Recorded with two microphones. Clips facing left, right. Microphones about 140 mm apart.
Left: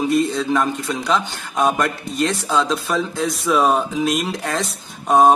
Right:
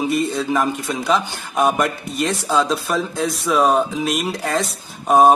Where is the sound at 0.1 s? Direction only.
Centre (ahead or behind).